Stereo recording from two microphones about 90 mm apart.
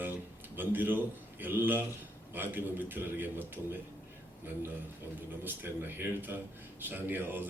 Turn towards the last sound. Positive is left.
turn(degrees=-20)  # may be behind; listen again after turning